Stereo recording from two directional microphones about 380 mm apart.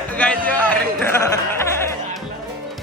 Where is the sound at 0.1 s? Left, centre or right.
Centre.